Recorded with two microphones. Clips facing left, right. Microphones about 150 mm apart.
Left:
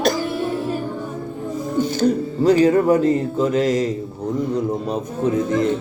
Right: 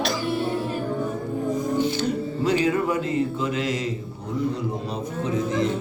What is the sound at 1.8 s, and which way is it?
Speech, 45° left (ahead or behind).